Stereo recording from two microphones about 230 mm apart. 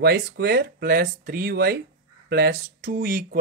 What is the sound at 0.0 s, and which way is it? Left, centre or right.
Speech, right.